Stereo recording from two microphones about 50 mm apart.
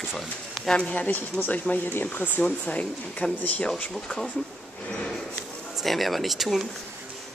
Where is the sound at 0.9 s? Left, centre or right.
Left.